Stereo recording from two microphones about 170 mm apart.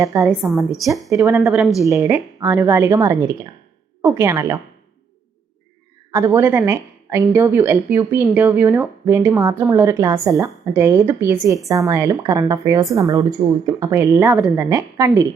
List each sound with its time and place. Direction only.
0.0 s a woman's voice: 20° right (ahead or behind)
0.3 s a woman's voice: centre (ahead or behind)
1.8 s speech: 15° right (ahead or behind)
6.1 s a woman's voice: 15° right (ahead or behind)